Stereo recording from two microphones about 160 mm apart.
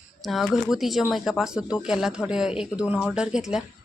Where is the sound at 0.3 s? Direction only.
Centre (ahead or behind).